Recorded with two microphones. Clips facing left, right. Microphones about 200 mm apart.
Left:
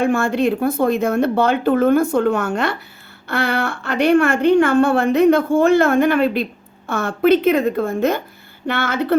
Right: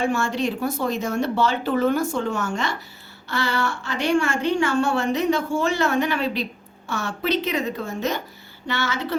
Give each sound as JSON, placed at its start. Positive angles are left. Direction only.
{"t": 0.0, "sound": "a woman's voice", "side_deg": 55}